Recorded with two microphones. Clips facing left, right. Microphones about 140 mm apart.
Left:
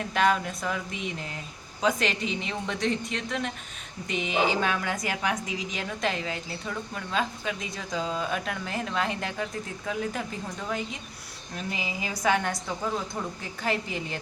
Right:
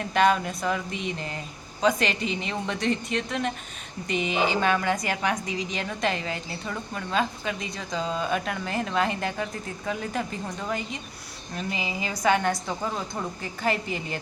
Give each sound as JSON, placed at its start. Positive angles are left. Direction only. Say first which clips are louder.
{"t": 0.0, "sound": "a woman's voice", "louder": "right 3 dB", "side_deg": 0}